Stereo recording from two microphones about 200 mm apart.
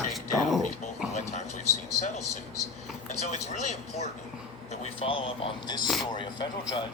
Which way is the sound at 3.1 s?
35° left (ahead or behind).